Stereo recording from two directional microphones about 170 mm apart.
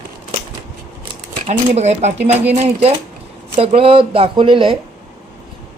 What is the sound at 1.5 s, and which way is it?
Speech, 40° right (ahead or behind).